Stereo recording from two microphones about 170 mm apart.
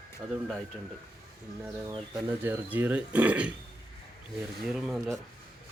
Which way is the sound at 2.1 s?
10° right (ahead or behind).